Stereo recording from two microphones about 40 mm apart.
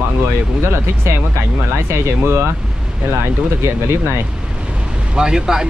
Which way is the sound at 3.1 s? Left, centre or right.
Right.